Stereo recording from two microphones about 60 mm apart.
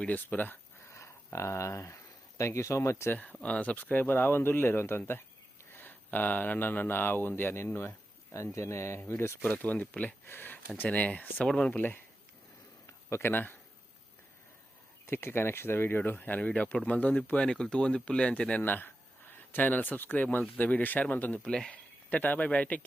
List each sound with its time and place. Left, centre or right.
0.0 s speech: left
0.9 s a sound: left
2.4 s speech: left
3.4 s speech: left
9.4 s speech: left
10.2 s speech: left
10.8 s speech: left
11.4 s speech: centre
13.2 s speech: left
15.0 s speech: left; by 18.6 s centre
18.6 s speech: left
21.3 s speech: centre
22.1 s speech: left